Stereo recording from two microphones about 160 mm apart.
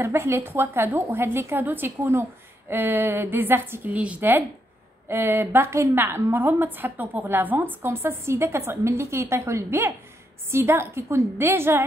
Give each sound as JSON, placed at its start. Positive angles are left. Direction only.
{"t": 0.0, "sound": "a woman's voice", "side_deg": -15}